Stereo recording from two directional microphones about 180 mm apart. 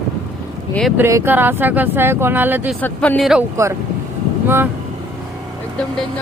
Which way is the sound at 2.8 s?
10° left (ahead or behind).